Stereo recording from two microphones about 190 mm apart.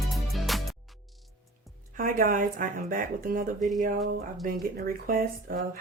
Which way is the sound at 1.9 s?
45° right (ahead or behind).